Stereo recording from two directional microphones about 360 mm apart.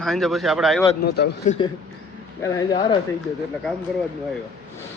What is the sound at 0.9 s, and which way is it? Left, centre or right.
Speech, left.